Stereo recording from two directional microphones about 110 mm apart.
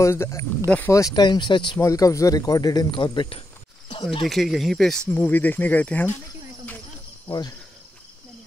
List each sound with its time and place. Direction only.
0.0 s speech: 25° left (ahead or behind)
0.7 s speech: 15° left (ahead or behind)
0.9 s speech: 35° left (ahead or behind)
1.8 s speech: 30° left (ahead or behind); by 3.3 s 45° left (ahead or behind)
4.3 s speech: centre (ahead or behind)
5.0 s speech: 15° left (ahead or behind)
7.2 s speech: 40° left (ahead or behind)